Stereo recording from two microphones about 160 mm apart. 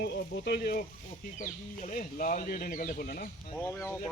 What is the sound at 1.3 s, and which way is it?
Speech, 55° left (ahead or behind).